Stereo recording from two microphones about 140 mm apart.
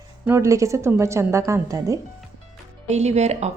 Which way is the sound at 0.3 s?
20° right (ahead or behind).